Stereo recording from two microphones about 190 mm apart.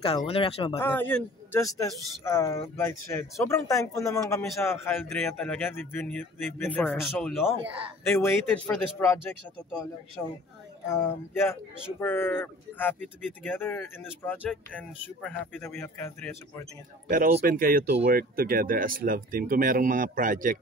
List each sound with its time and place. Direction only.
0.0 s speech: 30° left (ahead or behind)
0.7 s speech: 10° left (ahead or behind)
17.1 s speech: 45° right (ahead or behind)